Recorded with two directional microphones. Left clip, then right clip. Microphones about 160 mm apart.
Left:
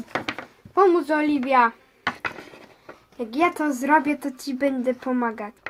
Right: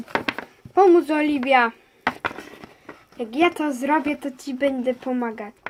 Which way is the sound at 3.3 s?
10° right (ahead or behind).